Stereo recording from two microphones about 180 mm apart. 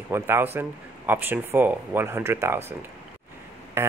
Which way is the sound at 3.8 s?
15° right (ahead or behind).